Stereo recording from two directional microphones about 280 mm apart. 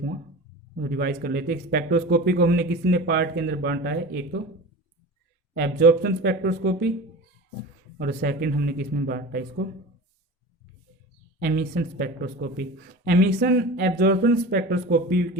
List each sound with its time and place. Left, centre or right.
0.8 s a man's voice: right
5.5 s a man's voice: right
7.9 s a man's voice: right
11.3 s a man's voice: right